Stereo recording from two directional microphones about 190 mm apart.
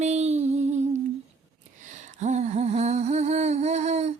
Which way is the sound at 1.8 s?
40° right (ahead or behind).